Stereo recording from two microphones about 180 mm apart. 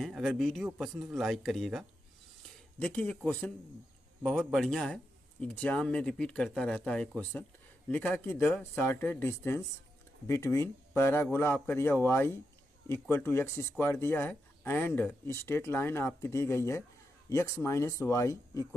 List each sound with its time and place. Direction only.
0.0 s speech: centre (ahead or behind); by 18.8 s 15° left (ahead or behind)